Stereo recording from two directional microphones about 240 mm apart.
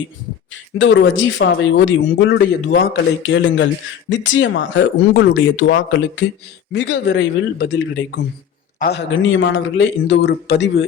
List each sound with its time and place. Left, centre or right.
0.8 s speech: left